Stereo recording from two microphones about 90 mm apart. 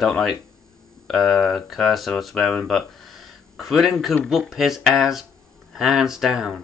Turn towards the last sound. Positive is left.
turn(degrees=-5)  # may be behind; listen again after turning